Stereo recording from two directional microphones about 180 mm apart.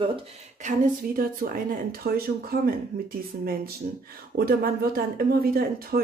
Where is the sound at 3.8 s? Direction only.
50° right (ahead or behind).